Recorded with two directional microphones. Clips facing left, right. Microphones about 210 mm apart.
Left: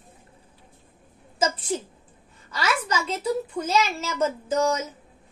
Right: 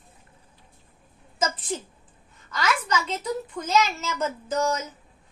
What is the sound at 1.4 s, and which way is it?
Speech, 10° left (ahead or behind).